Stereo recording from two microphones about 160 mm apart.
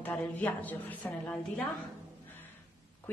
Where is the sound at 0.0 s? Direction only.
10° left (ahead or behind).